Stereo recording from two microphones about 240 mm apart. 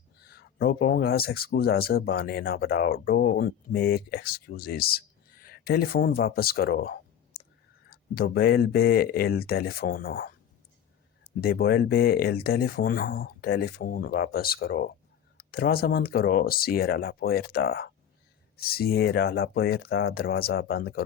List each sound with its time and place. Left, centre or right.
0.3 s speech: left
11.3 s speech: left